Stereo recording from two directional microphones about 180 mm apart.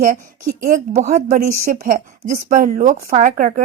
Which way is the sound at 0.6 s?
45° right (ahead or behind).